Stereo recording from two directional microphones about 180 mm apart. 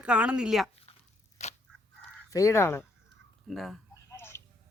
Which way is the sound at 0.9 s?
35° left (ahead or behind).